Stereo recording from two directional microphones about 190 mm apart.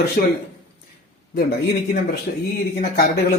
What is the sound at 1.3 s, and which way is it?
Speech, 60° left (ahead or behind).